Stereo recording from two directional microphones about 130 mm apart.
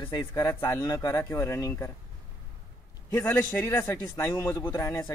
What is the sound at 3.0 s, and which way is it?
Speech, 20° left (ahead or behind).